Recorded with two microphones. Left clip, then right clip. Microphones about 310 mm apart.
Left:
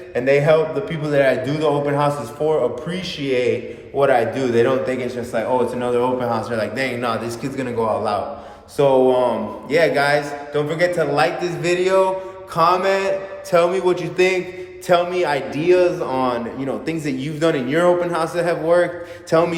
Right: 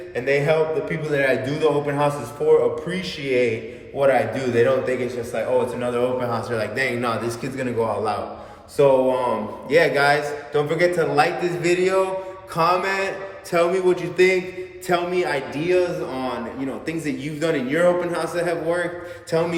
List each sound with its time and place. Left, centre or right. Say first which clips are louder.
0.1 s a man's voice: left 5 dB; centre
19.3 s mantra: left 5 dB; centre